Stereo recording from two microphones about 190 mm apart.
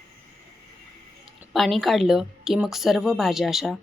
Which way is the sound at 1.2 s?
Centre (ahead or behind).